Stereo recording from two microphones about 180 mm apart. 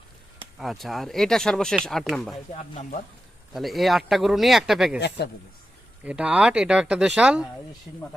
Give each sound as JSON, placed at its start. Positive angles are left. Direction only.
{"t": 0.6, "sound": "speech", "side_deg": 0}
{"t": 2.5, "sound": "speech", "side_deg": 45}
{"t": 3.5, "sound": "speech", "side_deg": 0}
{"t": 4.9, "sound": "a man's voice", "side_deg": 70}
{"t": 6.1, "sound": "speech", "side_deg": -5}